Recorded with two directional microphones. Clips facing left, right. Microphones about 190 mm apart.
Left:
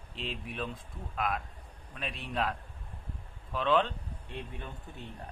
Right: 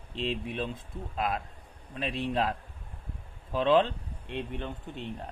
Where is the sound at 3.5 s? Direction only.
30° right (ahead or behind).